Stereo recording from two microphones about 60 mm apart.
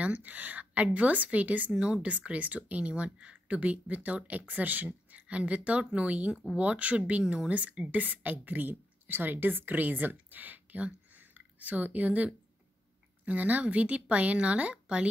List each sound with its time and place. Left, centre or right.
0.0 s speech: right